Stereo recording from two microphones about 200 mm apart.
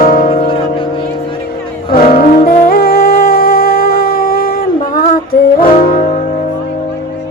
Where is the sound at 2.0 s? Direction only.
40° left (ahead or behind).